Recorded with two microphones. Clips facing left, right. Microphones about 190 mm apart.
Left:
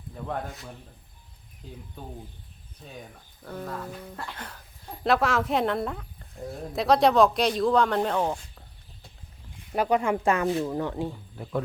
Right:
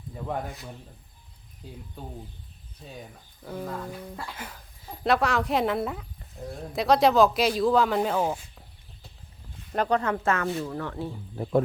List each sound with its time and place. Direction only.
0.1 s a man's voice: 10° right (ahead or behind)
2.8 s speech: 5° right (ahead or behind)
9.7 s speech: 10° left (ahead or behind)
11.4 s speech: 40° right (ahead or behind)